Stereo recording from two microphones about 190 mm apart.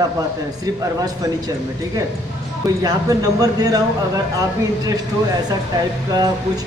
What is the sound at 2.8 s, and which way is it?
Speech, 20° right (ahead or behind).